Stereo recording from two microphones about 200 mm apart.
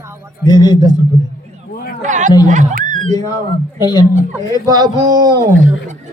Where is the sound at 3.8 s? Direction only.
20° left (ahead or behind).